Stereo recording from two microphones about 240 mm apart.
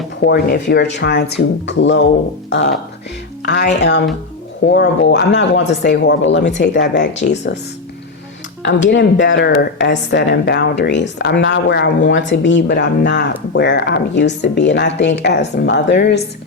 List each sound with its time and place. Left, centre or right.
0.3 s speech: left
8.6 s speech: left